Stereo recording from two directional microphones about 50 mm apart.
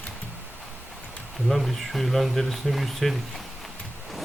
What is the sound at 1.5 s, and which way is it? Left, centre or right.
Speech, centre.